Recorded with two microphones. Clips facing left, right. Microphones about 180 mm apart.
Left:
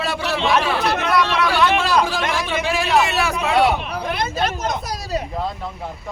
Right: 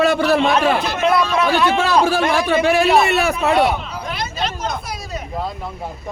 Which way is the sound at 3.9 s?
55° left (ahead or behind).